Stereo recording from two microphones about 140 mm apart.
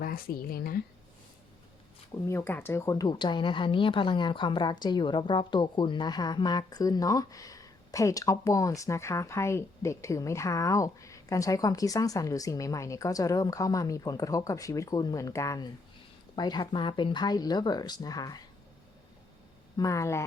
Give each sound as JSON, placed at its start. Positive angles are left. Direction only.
{"t": 0.0, "sound": "speech", "side_deg": 90}
{"t": 2.3, "sound": "a woman's voice", "side_deg": 15}
{"t": 19.7, "sound": "a woman's voice", "side_deg": 25}